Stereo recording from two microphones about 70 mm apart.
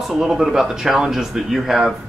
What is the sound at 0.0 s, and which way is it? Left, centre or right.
Speech, centre.